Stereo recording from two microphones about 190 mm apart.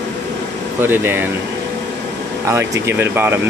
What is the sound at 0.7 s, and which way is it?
Speech, 10° right (ahead or behind).